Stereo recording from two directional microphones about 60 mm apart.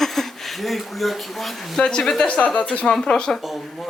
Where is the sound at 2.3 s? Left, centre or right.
Left.